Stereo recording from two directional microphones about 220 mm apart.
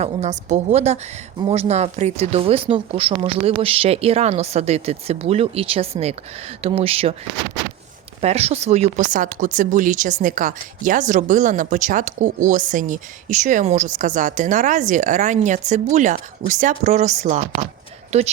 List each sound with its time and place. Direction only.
0.0 s speech: 30° right (ahead or behind)
8.2 s speech: 30° right (ahead or behind)